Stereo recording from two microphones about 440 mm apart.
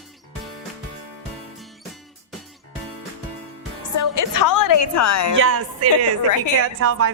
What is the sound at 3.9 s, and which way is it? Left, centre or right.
A woman's voice, left.